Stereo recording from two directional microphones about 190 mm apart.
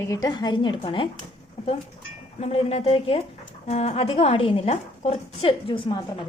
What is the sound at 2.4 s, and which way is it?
A woman's voice, 30° left (ahead or behind).